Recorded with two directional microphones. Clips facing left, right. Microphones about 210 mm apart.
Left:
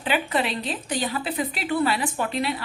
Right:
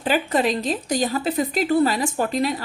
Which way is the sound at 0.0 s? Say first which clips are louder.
Right 4 dB; 40° right (ahead or behind).